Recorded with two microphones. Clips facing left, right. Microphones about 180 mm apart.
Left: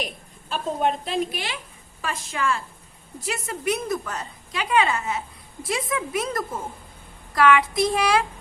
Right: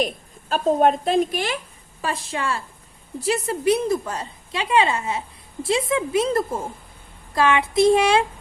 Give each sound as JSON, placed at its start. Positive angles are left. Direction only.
{"t": 0.0, "sound": "a woman's voice", "side_deg": -45}
{"t": 2.0, "sound": "a woman's voice", "side_deg": -35}